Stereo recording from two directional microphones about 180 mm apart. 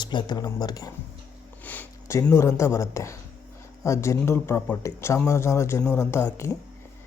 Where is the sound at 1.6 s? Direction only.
10° left (ahead or behind).